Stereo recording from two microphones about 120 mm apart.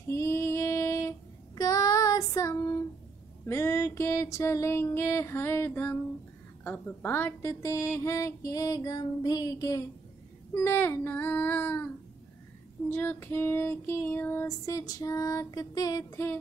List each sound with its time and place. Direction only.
0.1 s child singing: 25° left (ahead or behind)
3.4 s female singing: 25° left (ahead or behind)
12.9 s female singing: 15° left (ahead or behind)